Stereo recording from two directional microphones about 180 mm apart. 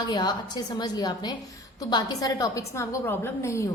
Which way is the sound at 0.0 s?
25° left (ahead or behind).